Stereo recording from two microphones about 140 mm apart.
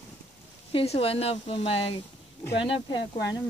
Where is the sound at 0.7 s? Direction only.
45° left (ahead or behind).